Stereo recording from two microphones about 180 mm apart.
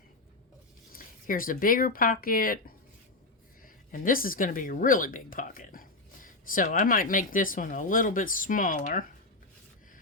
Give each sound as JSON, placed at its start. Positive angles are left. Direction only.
{"t": 0.9, "sound": "speech", "side_deg": 50}